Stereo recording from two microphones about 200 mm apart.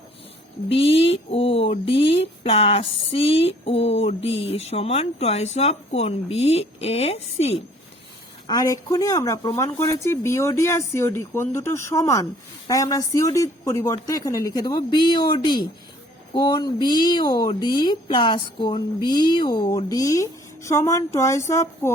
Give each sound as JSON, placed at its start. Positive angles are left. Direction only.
{"t": 0.7, "sound": "speech", "side_deg": 30}
{"t": 8.4, "sound": "speech", "side_deg": 20}